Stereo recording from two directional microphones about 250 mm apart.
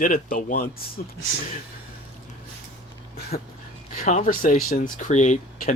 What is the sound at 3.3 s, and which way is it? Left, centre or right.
Speech, left.